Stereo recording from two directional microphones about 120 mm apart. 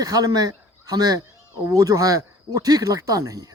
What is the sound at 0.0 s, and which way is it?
Speech, 30° right (ahead or behind).